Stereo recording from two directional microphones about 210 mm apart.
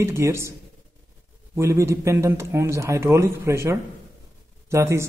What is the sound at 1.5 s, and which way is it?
Speech, 15° right (ahead or behind).